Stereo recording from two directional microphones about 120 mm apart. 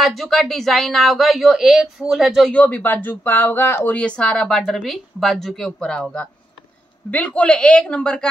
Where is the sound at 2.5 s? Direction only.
10° left (ahead or behind).